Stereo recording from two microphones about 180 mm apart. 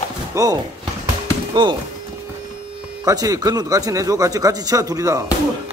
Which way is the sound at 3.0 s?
20° right (ahead or behind).